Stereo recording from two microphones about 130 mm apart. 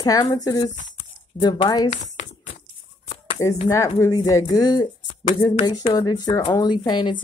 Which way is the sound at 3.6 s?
25° left (ahead or behind).